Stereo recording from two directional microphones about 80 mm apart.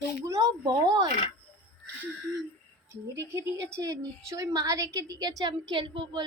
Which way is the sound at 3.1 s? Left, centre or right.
Right.